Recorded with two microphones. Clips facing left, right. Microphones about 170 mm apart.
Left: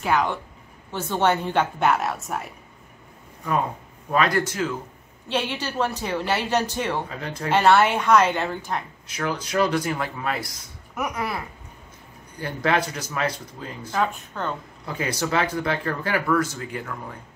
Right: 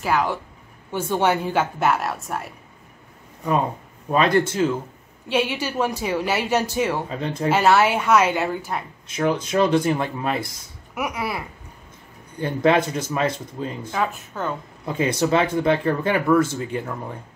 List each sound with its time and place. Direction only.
0.0 s a woman's voice: 5° right (ahead or behind)
4.1 s speech: 25° right (ahead or behind)
5.3 s a woman's voice: 10° right (ahead or behind)
7.1 s speech: 25° right (ahead or behind)
7.4 s a woman's voice: 5° right (ahead or behind)
9.1 s speech: 25° right (ahead or behind)
11.0 s a woman's voice: 10° right (ahead or behind)
12.4 s speech: 25° right (ahead or behind)
13.9 s speech: 5° right (ahead or behind)
14.9 s speech: 25° right (ahead or behind)